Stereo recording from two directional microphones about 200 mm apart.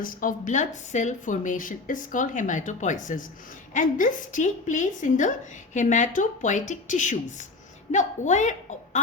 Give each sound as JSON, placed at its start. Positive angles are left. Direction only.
{"t": 0.0, "sound": "a woman's voice", "side_deg": 40}